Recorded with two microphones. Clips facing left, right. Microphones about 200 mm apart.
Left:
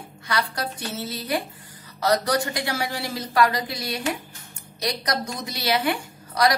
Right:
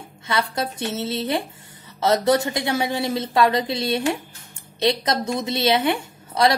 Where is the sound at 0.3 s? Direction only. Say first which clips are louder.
Right 3 dB; 25° right (ahead or behind).